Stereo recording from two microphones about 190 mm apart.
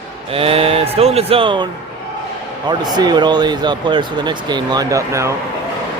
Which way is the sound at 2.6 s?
20° right (ahead or behind).